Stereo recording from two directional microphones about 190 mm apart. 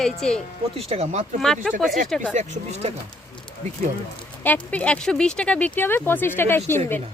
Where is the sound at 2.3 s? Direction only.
35° right (ahead or behind).